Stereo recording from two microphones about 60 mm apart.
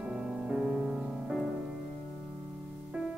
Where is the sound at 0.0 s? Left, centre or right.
Centre.